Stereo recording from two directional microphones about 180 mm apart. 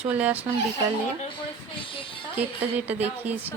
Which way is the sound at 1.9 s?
30° left (ahead or behind).